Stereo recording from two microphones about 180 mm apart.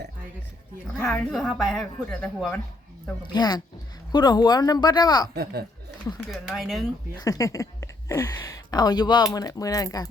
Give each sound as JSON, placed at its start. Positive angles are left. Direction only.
{"t": 1.0, "sound": "a woman's voice", "side_deg": 0}
{"t": 3.3, "sound": "speech", "side_deg": 20}
{"t": 5.3, "sound": "speech", "side_deg": -60}
{"t": 6.3, "sound": "a woman's voice", "side_deg": 0}
{"t": 7.2, "sound": "speech", "side_deg": 15}